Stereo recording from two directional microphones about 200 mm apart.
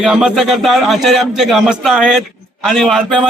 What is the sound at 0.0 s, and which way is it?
A man's voice, 5° right (ahead or behind).